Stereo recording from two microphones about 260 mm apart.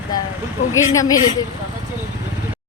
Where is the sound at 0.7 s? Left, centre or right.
Centre.